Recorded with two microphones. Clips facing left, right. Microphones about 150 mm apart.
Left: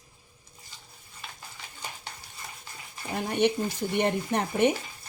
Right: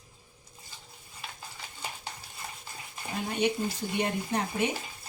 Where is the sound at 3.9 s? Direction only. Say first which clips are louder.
Left 4 dB; 60° left (ahead or behind).